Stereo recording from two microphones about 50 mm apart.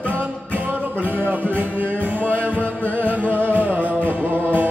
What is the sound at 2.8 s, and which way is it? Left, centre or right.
Music, right.